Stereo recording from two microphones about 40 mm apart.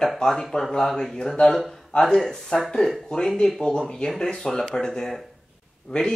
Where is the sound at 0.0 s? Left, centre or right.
Centre.